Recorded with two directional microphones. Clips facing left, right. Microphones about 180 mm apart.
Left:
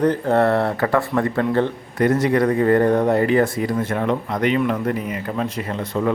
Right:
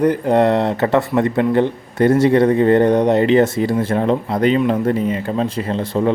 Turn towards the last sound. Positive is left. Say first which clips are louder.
# right 4 dB
turn(degrees=-30)  # may be behind; listen again after turning